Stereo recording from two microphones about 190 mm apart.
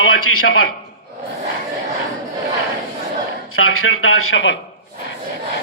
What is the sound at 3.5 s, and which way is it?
Speech, 90° left.